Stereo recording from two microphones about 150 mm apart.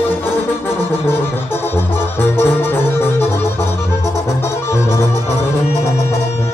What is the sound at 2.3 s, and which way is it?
Music, 15° left (ahead or behind).